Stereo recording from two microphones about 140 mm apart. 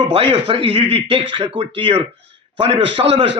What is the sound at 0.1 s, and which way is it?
A man's voice, 45° right (ahead or behind).